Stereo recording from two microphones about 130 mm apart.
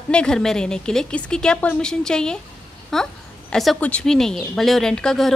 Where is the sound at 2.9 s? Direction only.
5° left (ahead or behind).